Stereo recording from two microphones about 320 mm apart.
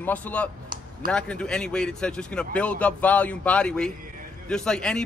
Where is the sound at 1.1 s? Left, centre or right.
Centre.